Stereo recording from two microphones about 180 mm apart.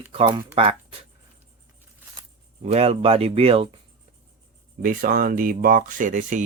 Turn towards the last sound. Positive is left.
turn(degrees=-45)  # may be behind; listen again after turning